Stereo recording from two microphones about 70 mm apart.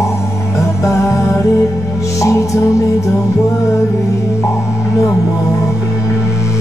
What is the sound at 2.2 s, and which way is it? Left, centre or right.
Music, left.